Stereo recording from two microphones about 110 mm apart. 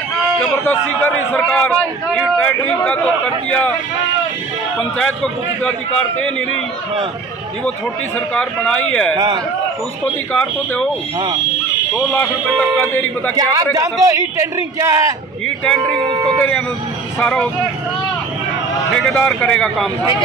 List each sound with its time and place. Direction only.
0.4 s a man's voice: 15° left (ahead or behind)
4.7 s speech: 10° left (ahead or behind)
8.4 s speech: 10° left (ahead or behind)
9.1 s a man's voice: 40° right (ahead or behind)
10.3 s speech: 10° left (ahead or behind)
11.9 s speech: 15° left (ahead or behind)
13.4 s a man's voice: 30° right (ahead or behind)
15.4 s speech: 10° left (ahead or behind)
16.0 s speech: 50° right (ahead or behind)
16.3 s speech: 10° left (ahead or behind)
18.9 s speech: 10° left (ahead or behind)